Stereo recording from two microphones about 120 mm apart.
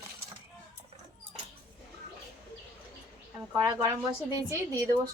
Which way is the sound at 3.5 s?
35° right (ahead or behind).